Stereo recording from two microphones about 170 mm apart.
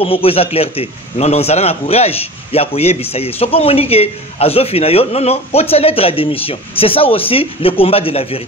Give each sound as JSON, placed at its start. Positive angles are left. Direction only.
{"t": 0.0, "sound": "a man's voice", "side_deg": 35}